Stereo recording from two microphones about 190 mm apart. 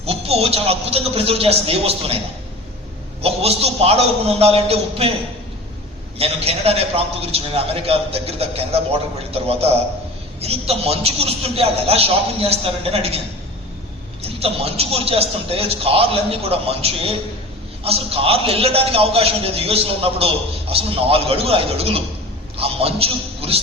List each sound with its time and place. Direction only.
0.0 s a man's voice: 30° right (ahead or behind)
3.2 s a man's voice: 30° right (ahead or behind)
6.1 s a man's voice: 30° right (ahead or behind)
14.3 s a man's voice: 30° right (ahead or behind)